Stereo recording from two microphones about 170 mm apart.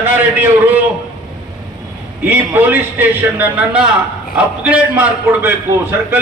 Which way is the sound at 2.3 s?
10° right (ahead or behind).